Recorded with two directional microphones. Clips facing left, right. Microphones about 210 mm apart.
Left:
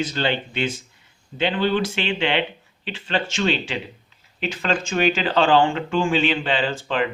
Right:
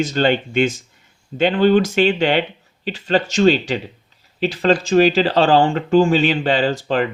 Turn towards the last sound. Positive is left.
turn(degrees=-40)  # may be behind; listen again after turning